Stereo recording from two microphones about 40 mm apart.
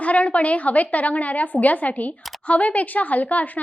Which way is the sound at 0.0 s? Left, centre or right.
Left.